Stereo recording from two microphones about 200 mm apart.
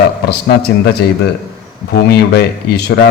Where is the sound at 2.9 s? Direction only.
65° left (ahead or behind).